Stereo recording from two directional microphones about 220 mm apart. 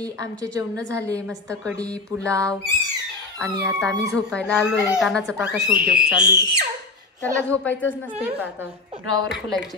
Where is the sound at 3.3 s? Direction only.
5° left (ahead or behind).